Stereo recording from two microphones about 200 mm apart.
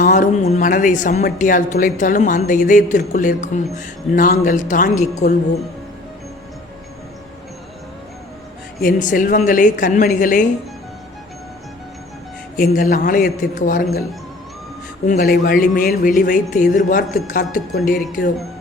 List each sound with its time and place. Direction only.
0.0 s speech: 40° left (ahead or behind)
8.8 s speech: 40° left (ahead or behind)
12.5 s speech: 45° left (ahead or behind)
15.0 s speech: 45° left (ahead or behind)